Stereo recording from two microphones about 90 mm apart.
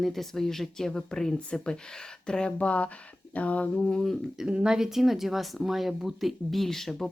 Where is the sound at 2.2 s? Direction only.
10° left (ahead or behind).